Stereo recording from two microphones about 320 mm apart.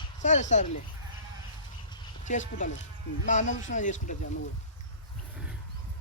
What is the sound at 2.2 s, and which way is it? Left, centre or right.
Speech, left.